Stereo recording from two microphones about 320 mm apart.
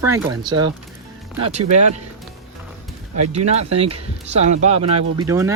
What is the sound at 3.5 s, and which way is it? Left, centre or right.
Speech, centre.